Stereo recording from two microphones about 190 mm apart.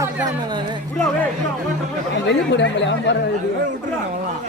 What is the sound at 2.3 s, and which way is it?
Speech, 70° left (ahead or behind).